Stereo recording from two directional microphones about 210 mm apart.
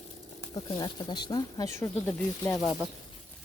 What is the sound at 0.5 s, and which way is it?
Speech, 20° left (ahead or behind).